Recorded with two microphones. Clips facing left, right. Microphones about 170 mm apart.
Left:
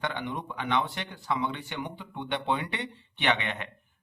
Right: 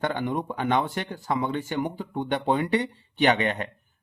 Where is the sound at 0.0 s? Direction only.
45° right (ahead or behind).